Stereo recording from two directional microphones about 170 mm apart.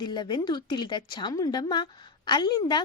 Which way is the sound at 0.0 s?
25° left (ahead or behind).